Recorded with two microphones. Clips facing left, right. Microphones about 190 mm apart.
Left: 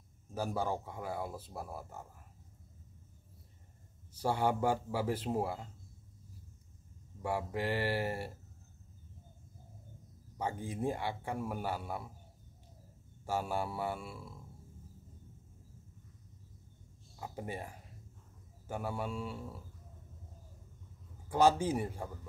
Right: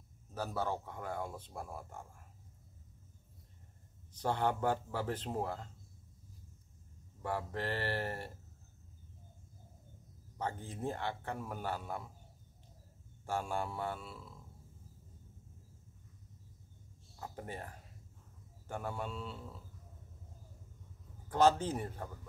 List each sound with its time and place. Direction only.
0.3 s speech: 10° left (ahead or behind)
4.1 s speech: 10° left (ahead or behind)
7.2 s speech: 10° left (ahead or behind)
10.3 s speech: 10° left (ahead or behind)
13.2 s speech: 10° left (ahead or behind)
17.2 s speech: 10° left (ahead or behind)
21.3 s speech: 10° left (ahead or behind)